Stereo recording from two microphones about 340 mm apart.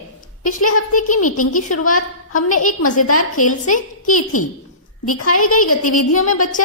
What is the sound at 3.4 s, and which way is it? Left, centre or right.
Speech, left.